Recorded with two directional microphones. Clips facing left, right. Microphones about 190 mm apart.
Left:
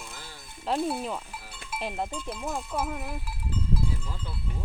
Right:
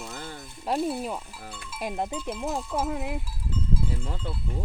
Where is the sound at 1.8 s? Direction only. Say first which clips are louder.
Right 3 dB; 20° right (ahead or behind).